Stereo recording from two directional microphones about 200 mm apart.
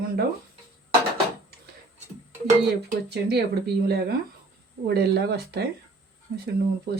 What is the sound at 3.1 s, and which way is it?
Speech, 55° right (ahead or behind).